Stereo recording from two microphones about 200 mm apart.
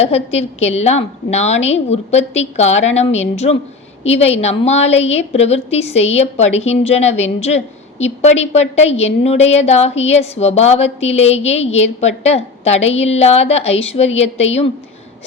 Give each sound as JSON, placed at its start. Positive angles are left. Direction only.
{"t": 0.0, "sound": "a woman's voice", "side_deg": 30}